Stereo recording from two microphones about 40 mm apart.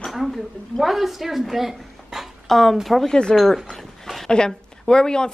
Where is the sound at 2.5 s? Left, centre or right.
Centre.